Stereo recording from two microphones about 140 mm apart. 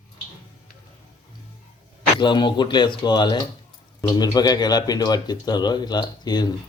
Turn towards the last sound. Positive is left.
turn(degrees=30)  # may be behind; listen again after turning